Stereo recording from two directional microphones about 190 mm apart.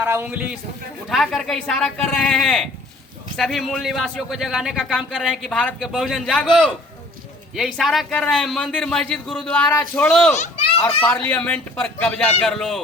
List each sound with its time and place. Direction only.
0.0 s a man's voice: 10° right (ahead or behind); by 10.3 s 5° left (ahead or behind)
10.3 s children playing: 40° left (ahead or behind)
11.0 s speech: 10° left (ahead or behind)